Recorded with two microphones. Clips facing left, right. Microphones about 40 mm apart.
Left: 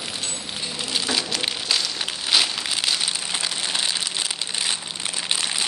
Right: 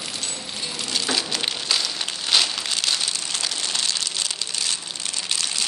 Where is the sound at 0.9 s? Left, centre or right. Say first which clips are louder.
Even; centre.